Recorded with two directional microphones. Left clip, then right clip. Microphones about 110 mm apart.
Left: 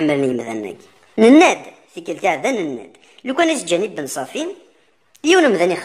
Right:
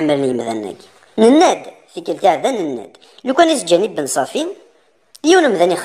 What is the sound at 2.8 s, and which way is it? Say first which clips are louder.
A woman's voice: right 5 dB; 20° right (ahead or behind).